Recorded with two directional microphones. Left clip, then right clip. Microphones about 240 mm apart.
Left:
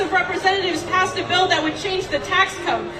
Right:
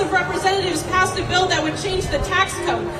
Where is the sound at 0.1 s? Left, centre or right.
Right.